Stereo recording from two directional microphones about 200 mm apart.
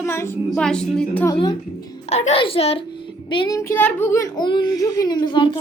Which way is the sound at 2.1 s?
30° left (ahead or behind).